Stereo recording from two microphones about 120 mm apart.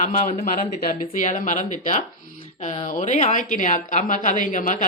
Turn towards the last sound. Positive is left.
turn(degrees=90)